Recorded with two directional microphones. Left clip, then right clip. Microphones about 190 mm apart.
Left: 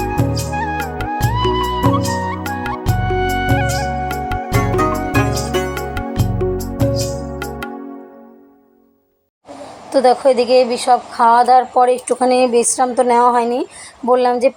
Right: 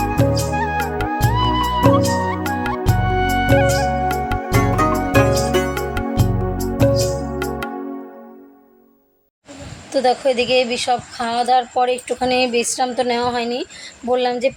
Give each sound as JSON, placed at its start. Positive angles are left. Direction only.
{"t": 0.0, "sound": "music", "side_deg": 0}
{"t": 9.9, "sound": "a woman's voice", "side_deg": 10}
{"t": 11.7, "sound": "speech", "side_deg": 45}
{"t": 12.2, "sound": "a woman's voice", "side_deg": 10}